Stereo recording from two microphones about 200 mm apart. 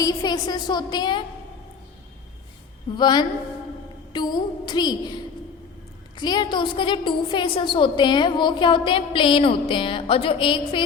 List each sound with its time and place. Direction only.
0.0 s a woman's voice: 20° left (ahead or behind)
2.9 s a woman's voice: 20° left (ahead or behind)
6.1 s a woman's voice: 20° left (ahead or behind)